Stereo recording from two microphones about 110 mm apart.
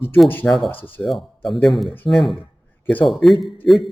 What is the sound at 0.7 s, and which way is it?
Speech, 15° left (ahead or behind).